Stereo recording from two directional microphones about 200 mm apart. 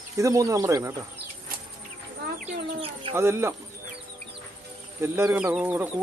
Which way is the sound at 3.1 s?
15° right (ahead or behind).